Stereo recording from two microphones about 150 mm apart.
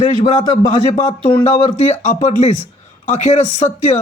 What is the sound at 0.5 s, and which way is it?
A man's voice, 50° left (ahead or behind).